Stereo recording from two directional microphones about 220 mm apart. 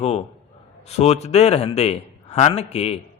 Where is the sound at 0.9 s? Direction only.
30° left (ahead or behind).